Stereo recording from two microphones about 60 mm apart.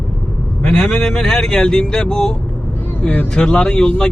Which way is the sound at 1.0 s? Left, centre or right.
Centre.